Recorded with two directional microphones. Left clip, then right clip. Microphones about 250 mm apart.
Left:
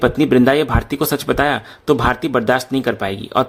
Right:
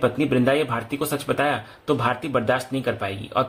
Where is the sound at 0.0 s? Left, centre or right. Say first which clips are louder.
Left 7 dB; left.